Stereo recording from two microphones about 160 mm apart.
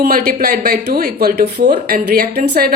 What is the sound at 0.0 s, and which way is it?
Speech, 70° right (ahead or behind).